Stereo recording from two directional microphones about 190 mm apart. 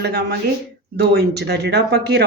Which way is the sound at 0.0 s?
60° right (ahead or behind).